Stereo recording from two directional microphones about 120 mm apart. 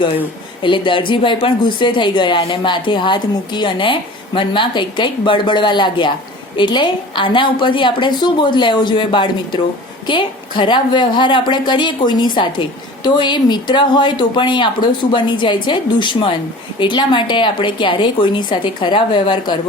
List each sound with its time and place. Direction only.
0.6 s a woman's voice: 45° left (ahead or behind)